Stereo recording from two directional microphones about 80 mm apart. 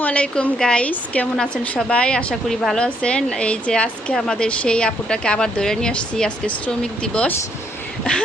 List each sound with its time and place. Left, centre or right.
0.0 s a woman's voice: centre